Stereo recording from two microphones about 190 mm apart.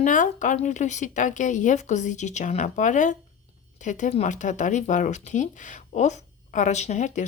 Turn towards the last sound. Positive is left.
turn(degrees=40)  # may be behind; listen again after turning